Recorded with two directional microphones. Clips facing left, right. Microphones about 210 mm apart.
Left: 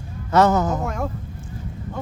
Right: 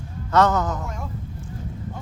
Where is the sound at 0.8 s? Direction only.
70° left (ahead or behind).